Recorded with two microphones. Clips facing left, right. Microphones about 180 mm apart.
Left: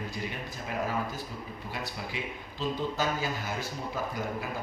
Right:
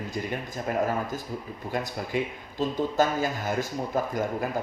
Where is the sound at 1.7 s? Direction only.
45° right (ahead or behind).